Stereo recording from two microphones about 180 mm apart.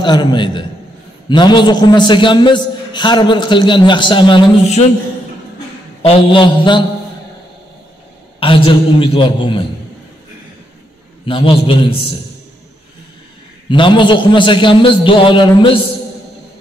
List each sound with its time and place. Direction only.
0.0 s a man's voice: 25° left (ahead or behind)
6.0 s a man's voice: 25° left (ahead or behind)
8.4 s a man's voice: 30° left (ahead or behind)
11.2 s a man's voice: 30° left (ahead or behind)
13.7 s a man's voice: 25° left (ahead or behind)